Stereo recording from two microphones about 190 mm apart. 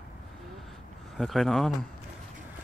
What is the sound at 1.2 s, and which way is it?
Speech, centre (ahead or behind).